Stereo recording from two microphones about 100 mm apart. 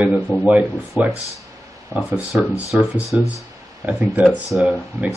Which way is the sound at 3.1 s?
15° right (ahead or behind).